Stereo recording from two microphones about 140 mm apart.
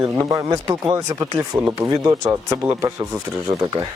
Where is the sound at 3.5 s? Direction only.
30° right (ahead or behind).